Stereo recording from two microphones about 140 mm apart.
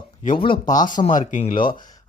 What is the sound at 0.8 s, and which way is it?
Speech, 65° left (ahead or behind).